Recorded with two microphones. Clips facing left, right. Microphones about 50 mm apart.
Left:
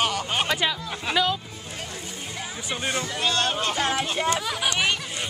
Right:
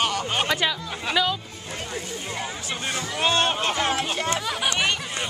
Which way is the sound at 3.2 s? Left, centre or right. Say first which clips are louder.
Right 5 dB; right.